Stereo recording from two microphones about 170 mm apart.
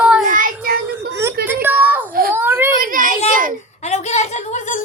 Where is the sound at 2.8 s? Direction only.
55° right (ahead or behind).